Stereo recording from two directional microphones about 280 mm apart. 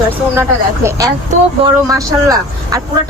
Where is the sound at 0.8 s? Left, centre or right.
Centre.